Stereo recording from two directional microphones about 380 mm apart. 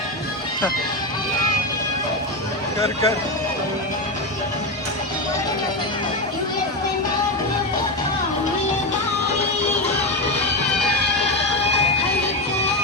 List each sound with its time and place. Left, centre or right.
2.8 s speech: centre